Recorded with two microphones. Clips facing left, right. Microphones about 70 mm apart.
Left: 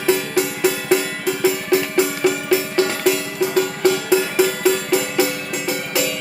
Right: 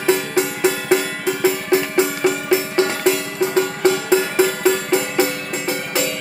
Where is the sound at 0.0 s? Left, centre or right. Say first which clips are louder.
Right 1 dB; right.